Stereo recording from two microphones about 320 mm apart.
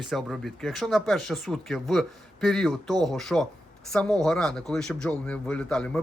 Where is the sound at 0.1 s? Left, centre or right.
Centre.